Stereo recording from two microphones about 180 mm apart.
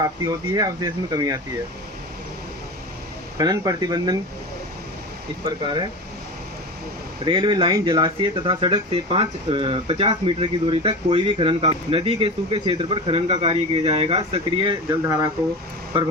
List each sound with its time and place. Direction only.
0.5 s speech: 20° right (ahead or behind)
3.3 s speech: 20° right (ahead or behind)
5.5 s speech: 25° right (ahead or behind)
7.3 s speech: 25° right (ahead or behind)